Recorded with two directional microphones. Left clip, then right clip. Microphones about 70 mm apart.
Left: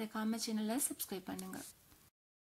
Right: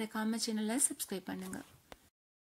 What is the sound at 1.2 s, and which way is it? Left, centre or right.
Speech, right.